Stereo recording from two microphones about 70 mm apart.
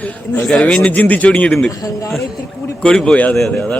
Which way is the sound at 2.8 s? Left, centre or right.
Centre.